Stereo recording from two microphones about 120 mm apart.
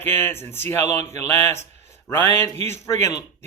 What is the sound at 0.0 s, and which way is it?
Speech, 20° left (ahead or behind).